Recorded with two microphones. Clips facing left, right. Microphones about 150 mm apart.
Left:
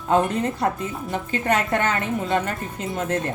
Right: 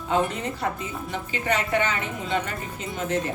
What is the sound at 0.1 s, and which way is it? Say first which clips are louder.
A woman's voice: left 5 dB; 50° left (ahead or behind).